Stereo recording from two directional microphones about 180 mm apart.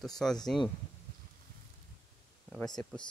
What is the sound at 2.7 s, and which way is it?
Speech, 25° left (ahead or behind).